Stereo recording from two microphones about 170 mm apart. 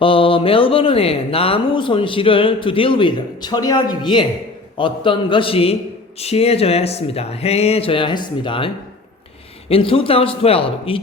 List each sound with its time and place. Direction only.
0.0 s speech: 30° left (ahead or behind)